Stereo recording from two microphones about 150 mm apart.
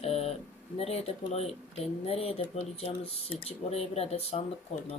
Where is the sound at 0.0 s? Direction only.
40° left (ahead or behind).